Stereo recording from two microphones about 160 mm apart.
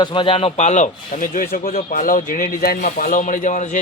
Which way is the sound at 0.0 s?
30° left (ahead or behind).